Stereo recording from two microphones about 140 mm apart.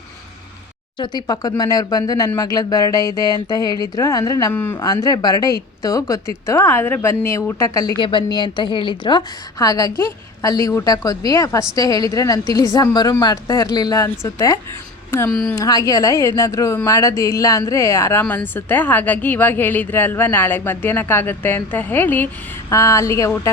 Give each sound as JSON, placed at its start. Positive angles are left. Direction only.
{"t": 0.9, "sound": "a woman's voice", "side_deg": 30}
{"t": 4.5, "sound": "a woman's voice", "side_deg": 15}
{"t": 4.9, "sound": "a woman's voice", "side_deg": 30}
{"t": 15.5, "sound": "a woman's voice", "side_deg": 25}